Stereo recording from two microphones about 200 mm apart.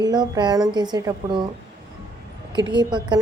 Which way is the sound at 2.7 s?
20° right (ahead or behind).